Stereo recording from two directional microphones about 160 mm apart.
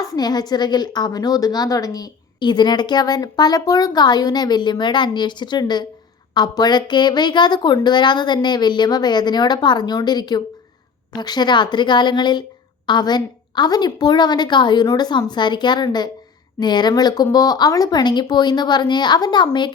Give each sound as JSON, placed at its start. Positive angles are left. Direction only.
{"t": 0.0, "sound": "a woman's voice", "side_deg": 25}